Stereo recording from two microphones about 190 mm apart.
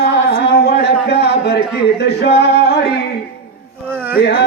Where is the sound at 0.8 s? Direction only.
60° left (ahead or behind).